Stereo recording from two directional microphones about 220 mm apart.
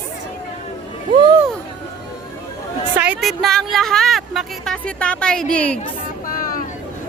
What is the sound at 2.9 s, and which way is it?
A woman's voice, 5° right (ahead or behind).